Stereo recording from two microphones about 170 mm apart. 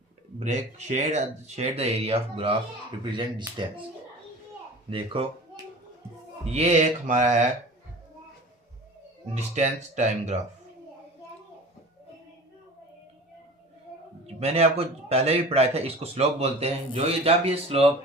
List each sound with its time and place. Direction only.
0.3 s speech: 40° right (ahead or behind)
4.9 s speech: 30° right (ahead or behind)
6.4 s speech: 40° right (ahead or behind)
9.3 s speech: 45° right (ahead or behind)
14.3 s speech: 35° right (ahead or behind)